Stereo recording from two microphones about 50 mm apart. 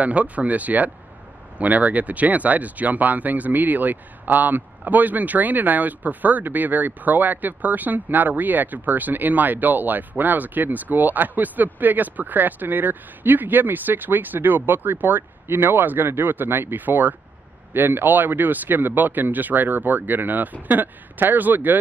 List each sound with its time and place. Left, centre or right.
0.0 s speech: right